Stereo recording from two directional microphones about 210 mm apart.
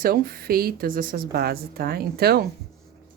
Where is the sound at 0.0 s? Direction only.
45° right (ahead or behind).